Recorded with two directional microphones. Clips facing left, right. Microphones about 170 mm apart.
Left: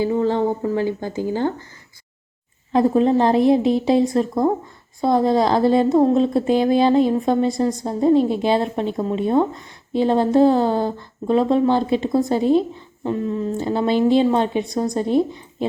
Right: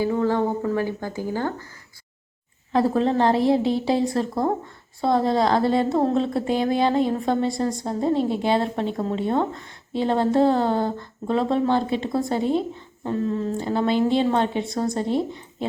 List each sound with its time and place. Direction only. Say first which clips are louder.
0.0 s speech: left 3 dB; 20° left (ahead or behind)
2.7 s a woman's voice: left 4 dB; 15° left (ahead or behind)
13.6 s a woman's voice: left 3 dB; 20° left (ahead or behind)